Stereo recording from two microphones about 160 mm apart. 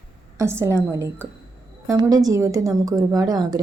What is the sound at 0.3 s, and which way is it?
A woman's voice, 15° right (ahead or behind).